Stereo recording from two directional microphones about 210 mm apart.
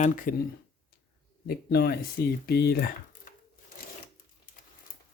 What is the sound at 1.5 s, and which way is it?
Speech, 50° left (ahead or behind).